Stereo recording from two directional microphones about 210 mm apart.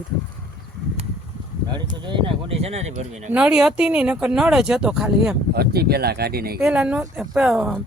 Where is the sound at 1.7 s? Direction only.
20° right (ahead or behind).